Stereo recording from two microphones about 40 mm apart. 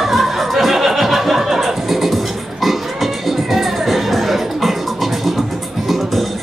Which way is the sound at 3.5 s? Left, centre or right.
Centre.